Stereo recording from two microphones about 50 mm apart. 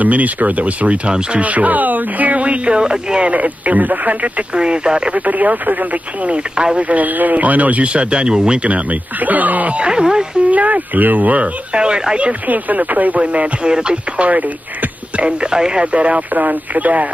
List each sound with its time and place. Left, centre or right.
0.0 s speech: right; by 3.3 s centre
3.3 s speech: right
4.6 s speech: centre
5.2 s speech: right
6.9 s speech: right
9.8 s speech: centre
10.5 s speech: right
12.4 s speech: right